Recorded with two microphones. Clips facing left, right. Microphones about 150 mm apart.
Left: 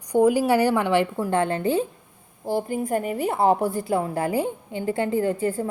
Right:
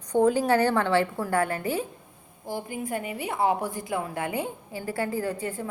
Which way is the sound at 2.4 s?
45° left (ahead or behind).